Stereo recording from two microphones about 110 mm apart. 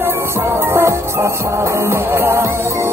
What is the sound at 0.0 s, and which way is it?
Music, 20° right (ahead or behind).